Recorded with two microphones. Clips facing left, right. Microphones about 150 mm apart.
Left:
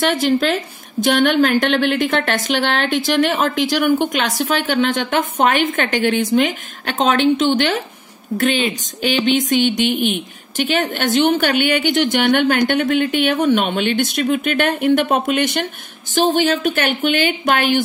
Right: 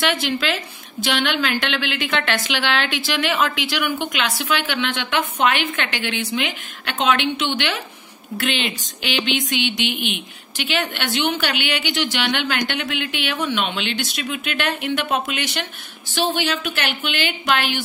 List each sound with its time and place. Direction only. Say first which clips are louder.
0.0 s speech: left 6 dB; 45° left (ahead or behind)